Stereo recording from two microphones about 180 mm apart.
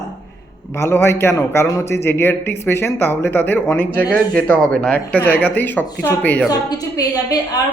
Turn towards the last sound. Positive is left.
turn(degrees=20)  # may be behind; listen again after turning